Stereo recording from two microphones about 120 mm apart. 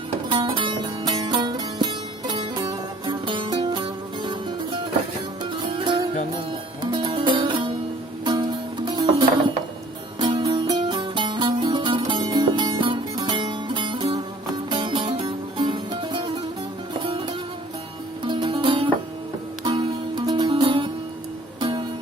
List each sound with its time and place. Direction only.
0.3 s music: 45° right (ahead or behind)